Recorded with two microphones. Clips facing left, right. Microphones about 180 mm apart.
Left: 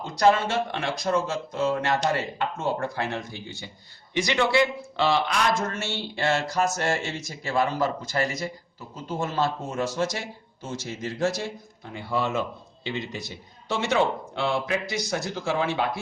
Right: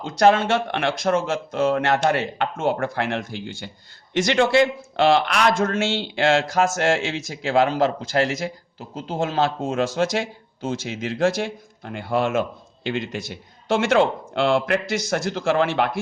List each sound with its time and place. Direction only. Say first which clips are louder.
0.0 s speech: right 4 dB; 75° right (ahead or behind)
4.4 s a man's voice: right 5 dB; 45° right (ahead or behind)
5.0 s speech: right 5 dB; 70° right (ahead or behind)
12.8 s speech: right 5 dB; 90° right